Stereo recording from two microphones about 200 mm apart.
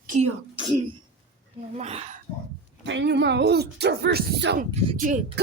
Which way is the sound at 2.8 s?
60° right (ahead or behind).